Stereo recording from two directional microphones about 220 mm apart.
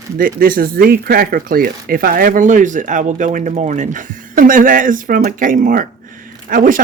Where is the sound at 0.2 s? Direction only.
40° right (ahead or behind).